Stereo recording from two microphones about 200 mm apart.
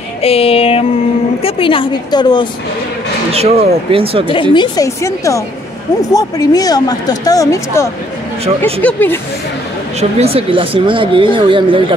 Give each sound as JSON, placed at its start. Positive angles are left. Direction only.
{"t": 0.2, "sound": "a woman's voice", "side_deg": 30}
{"t": 3.3, "sound": "speech", "side_deg": -30}
{"t": 4.3, "sound": "speech", "side_deg": 25}
{"t": 9.9, "sound": "speech", "side_deg": -30}